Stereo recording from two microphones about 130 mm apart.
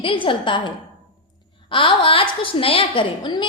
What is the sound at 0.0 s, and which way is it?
Speech, 40° left (ahead or behind).